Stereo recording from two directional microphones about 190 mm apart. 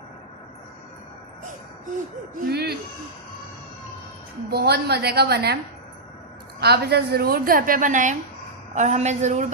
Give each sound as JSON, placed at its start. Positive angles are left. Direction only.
{"t": 2.5, "sound": "a woman's voice", "side_deg": -55}
{"t": 4.5, "sound": "a woman's voice", "side_deg": -60}
{"t": 6.6, "sound": "a woman's voice", "side_deg": -60}